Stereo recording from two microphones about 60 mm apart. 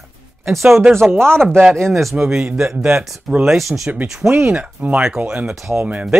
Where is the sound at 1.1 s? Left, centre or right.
Right.